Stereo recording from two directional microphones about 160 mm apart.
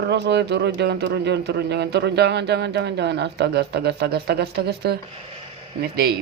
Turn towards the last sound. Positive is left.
turn(degrees=-80)